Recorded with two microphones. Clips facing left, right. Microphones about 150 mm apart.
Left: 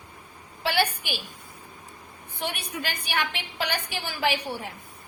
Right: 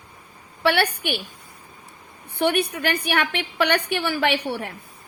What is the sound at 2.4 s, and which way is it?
A woman's voice, 65° right (ahead or behind).